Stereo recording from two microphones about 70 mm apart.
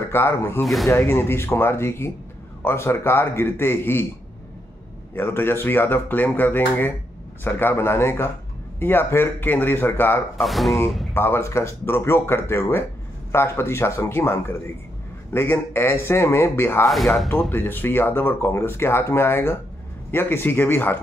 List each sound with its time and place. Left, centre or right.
0.1 s speech: left
5.1 s speech: left
10.4 s speech: centre
11.1 s speech: left
16.8 s speech: centre
17.5 s speech: left